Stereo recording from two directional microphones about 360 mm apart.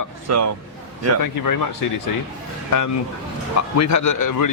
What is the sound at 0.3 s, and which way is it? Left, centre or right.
Speech, right.